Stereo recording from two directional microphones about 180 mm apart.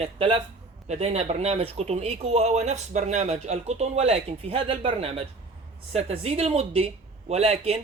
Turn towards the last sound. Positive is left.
turn(degrees=-35)  # may be behind; listen again after turning